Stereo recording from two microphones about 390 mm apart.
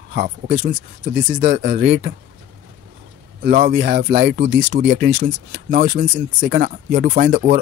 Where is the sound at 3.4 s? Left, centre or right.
Right.